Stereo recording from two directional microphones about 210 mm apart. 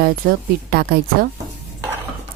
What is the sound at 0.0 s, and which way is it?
Speech, 45° right (ahead or behind).